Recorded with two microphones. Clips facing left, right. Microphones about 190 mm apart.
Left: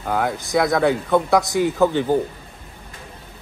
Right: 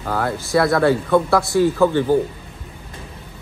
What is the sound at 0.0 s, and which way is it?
Speech, 15° left (ahead or behind).